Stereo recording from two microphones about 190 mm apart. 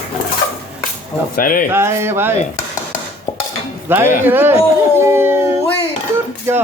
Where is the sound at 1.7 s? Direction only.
15° right (ahead or behind).